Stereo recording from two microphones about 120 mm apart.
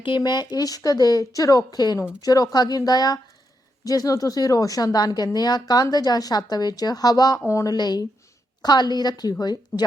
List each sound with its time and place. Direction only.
0.2 s a woman's voice: 35° left (ahead or behind)